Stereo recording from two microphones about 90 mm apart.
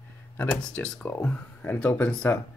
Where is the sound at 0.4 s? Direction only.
15° left (ahead or behind).